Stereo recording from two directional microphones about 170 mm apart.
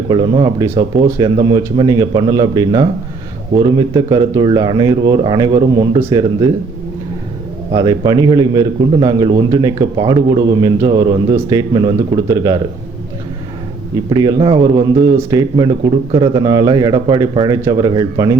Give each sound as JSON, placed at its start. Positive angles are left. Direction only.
{"t": 0.1, "sound": "a man's voice", "side_deg": -25}
{"t": 0.7, "sound": "a man's voice", "side_deg": -15}
{"t": 7.7, "sound": "a man's voice", "side_deg": -25}
{"t": 14.1, "sound": "a man's voice", "side_deg": -25}